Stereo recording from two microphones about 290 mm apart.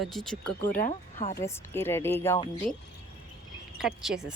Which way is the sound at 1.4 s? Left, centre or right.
Centre.